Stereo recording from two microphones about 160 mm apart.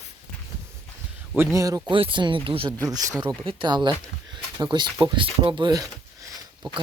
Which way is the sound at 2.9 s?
20° right (ahead or behind).